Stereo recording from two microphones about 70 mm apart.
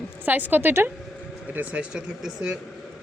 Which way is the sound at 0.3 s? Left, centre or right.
Right.